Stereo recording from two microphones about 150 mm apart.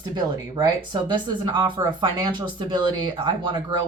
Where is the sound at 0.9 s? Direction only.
30° right (ahead or behind).